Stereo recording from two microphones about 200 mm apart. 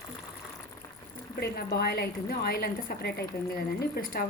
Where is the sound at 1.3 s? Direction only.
50° left (ahead or behind).